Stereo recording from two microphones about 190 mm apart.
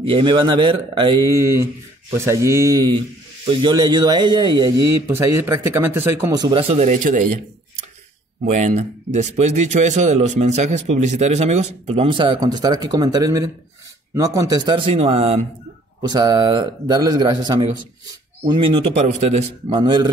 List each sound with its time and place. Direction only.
0.0 s speech: 25° right (ahead or behind)
5.0 s speech: 15° right (ahead or behind); by 7.2 s 40° right (ahead or behind)
8.5 s speech: 40° right (ahead or behind)
16.0 s speech: 20° right (ahead or behind)
19.8 s speech: 20° right (ahead or behind)